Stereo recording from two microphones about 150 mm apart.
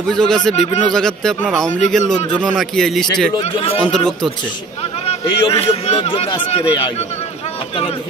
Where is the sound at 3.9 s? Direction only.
5° left (ahead or behind).